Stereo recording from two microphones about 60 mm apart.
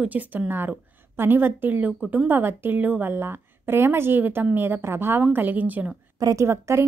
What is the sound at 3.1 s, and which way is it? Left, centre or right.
Speech, right.